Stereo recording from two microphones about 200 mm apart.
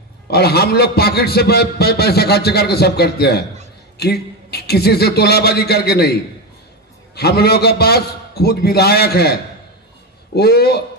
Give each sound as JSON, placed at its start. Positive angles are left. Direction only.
{"t": 0.3, "sound": "a man's voice", "side_deg": 55}
{"t": 7.2, "sound": "a man's voice", "side_deg": 55}